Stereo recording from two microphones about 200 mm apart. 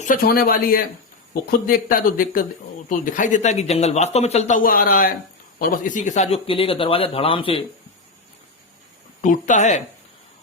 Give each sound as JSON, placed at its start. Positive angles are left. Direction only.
{"t": 0.0, "sound": "speech", "side_deg": 45}
{"t": 9.2, "sound": "speech", "side_deg": 40}